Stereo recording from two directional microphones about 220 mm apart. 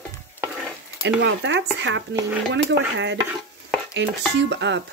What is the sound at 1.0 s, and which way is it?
Speech, 55° right (ahead or behind).